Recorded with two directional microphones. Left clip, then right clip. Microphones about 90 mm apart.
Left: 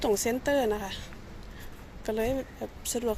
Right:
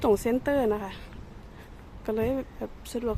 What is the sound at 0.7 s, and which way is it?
Speech, 50° right (ahead or behind).